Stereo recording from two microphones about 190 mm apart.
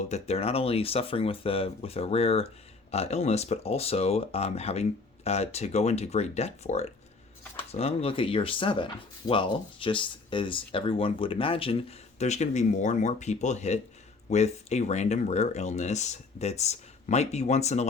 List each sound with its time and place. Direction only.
0.0 s speech: 35° left (ahead or behind)